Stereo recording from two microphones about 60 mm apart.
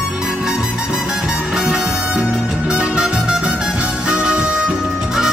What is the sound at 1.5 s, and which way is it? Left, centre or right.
Music, centre.